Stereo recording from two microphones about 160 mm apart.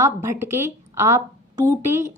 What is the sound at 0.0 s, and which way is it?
A woman's voice, 15° right (ahead or behind).